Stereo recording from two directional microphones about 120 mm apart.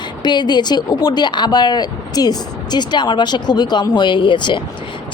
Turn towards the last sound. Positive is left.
turn(degrees=40)  # may be behind; listen again after turning